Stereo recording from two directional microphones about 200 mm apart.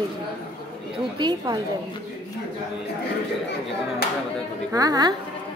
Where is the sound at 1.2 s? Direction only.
20° right (ahead or behind).